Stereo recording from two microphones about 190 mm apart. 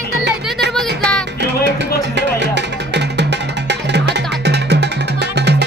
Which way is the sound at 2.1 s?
65° right (ahead or behind).